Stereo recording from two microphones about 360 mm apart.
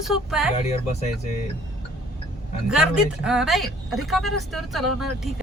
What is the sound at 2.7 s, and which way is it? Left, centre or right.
Speech, centre.